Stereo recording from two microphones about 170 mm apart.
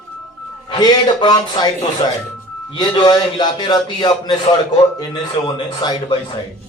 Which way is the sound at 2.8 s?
25° left (ahead or behind).